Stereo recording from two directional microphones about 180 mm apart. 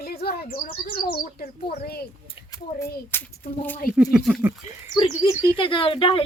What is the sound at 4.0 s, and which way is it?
Speech, 5° right (ahead or behind).